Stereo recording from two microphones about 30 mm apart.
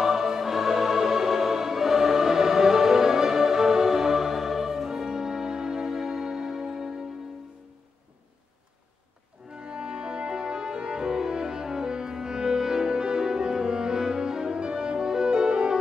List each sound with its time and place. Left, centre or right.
0.0 s music: centre
9.5 s music: right